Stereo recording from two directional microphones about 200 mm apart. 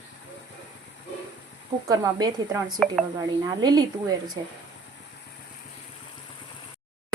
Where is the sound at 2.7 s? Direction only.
Centre (ahead or behind).